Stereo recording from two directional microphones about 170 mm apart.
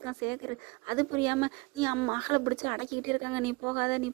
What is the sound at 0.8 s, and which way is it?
Speech, 25° right (ahead or behind).